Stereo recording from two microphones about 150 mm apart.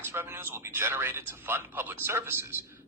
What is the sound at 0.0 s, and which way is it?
Speech, 15° right (ahead or behind).